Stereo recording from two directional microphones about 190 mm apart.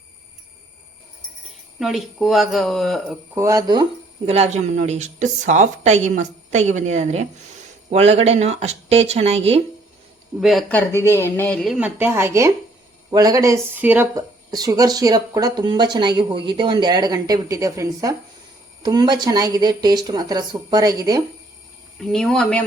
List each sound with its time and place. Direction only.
1.8 s speech: centre (ahead or behind)
3.3 s speech: 15° right (ahead or behind)
4.3 s a woman's voice: 35° right (ahead or behind)
10.4 s speech: centre (ahead or behind); by 21.2 s 20° right (ahead or behind)
21.9 s speech: 5° left (ahead or behind)